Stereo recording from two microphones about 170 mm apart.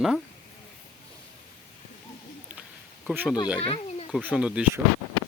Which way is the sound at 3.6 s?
35° left (ahead or behind).